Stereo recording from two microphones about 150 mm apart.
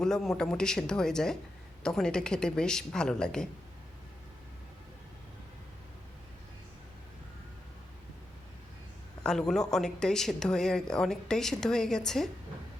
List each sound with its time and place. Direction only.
0.0 s speech: 5° left (ahead or behind)
9.2 s speech: 5° left (ahead or behind)